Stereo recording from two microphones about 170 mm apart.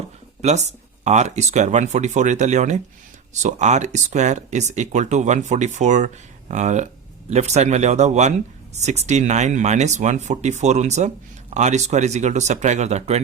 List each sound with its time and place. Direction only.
0.4 s speech: 40° right (ahead or behind)